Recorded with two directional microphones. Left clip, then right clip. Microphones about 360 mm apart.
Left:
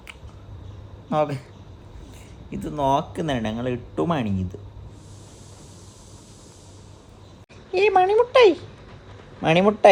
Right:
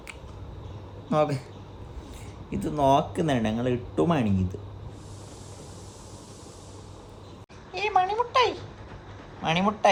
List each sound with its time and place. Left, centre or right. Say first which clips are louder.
1.1 s speech: left 2 dB; centre
2.5 s speech: even; centre
7.7 s speech: left 7 dB; centre